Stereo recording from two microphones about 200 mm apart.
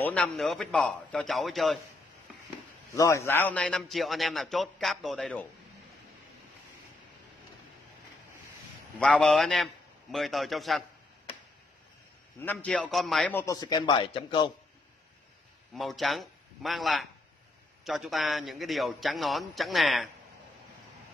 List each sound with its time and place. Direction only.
0.0 s a man's voice: 5° left (ahead or behind)
3.0 s a man's voice: 15° left (ahead or behind)
9.0 s a man's voice: centre (ahead or behind)
12.4 s a man's voice: 5° left (ahead or behind); by 14.5 s 25° left (ahead or behind)
15.7 s a man's voice: centre (ahead or behind)